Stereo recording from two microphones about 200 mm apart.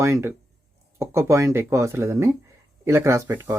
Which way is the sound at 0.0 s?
15° right (ahead or behind).